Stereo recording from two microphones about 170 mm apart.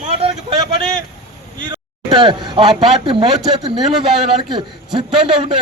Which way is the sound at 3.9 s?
Centre (ahead or behind).